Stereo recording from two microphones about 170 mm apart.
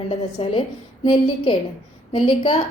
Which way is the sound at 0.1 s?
35° left (ahead or behind).